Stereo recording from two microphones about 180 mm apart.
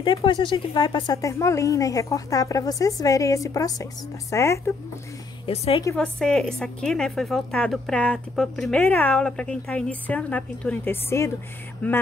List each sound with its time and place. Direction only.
0.0 s a woman's voice: 25° left (ahead or behind)
5.5 s a woman's voice: 30° left (ahead or behind)
5.9 s a woman's voice: 5° left (ahead or behind)